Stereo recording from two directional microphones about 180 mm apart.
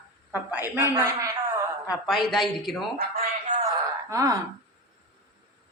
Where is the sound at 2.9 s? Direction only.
55° right (ahead or behind).